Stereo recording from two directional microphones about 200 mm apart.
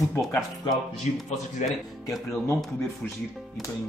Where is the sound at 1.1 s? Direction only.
35° left (ahead or behind).